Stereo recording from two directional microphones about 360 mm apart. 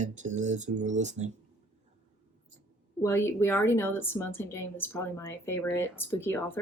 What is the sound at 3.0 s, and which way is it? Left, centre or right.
Speech, centre.